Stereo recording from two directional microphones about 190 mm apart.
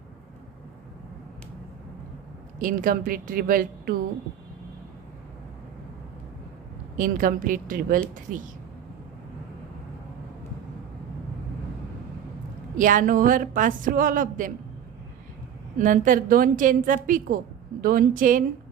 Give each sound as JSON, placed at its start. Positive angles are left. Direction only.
{"t": 2.6, "sound": "a woman's voice", "side_deg": -45}
{"t": 6.9, "sound": "a woman's voice", "side_deg": -45}
{"t": 12.7, "sound": "a woman's voice", "side_deg": -45}
{"t": 15.8, "sound": "a woman's voice", "side_deg": -45}